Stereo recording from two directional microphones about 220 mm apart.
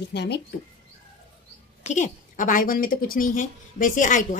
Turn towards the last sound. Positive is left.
turn(degrees=35)  # may be behind; listen again after turning